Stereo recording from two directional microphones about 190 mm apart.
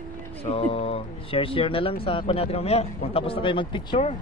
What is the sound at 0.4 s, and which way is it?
Speech, 30° left (ahead or behind).